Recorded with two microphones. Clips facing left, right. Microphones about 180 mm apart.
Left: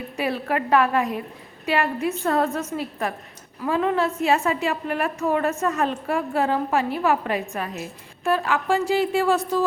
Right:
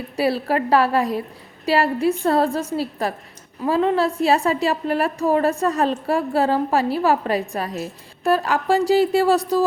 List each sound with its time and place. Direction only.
0.2 s a woman's voice: 35° right (ahead or behind)